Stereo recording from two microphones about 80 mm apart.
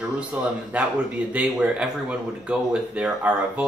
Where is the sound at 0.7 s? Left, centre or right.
Centre.